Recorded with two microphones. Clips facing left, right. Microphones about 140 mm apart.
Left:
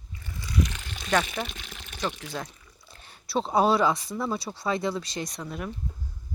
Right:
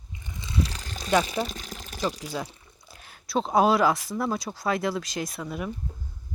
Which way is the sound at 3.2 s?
Centre (ahead or behind).